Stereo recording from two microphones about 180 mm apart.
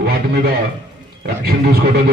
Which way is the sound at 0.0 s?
55° right (ahead or behind).